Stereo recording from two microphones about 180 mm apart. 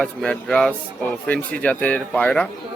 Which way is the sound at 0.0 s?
5° left (ahead or behind).